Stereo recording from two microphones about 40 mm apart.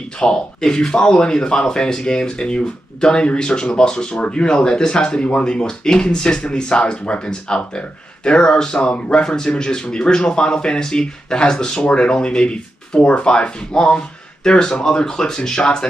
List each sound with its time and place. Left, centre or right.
0.2 s speech: centre